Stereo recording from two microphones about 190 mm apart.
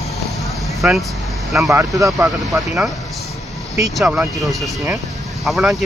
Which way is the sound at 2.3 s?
Centre (ahead or behind).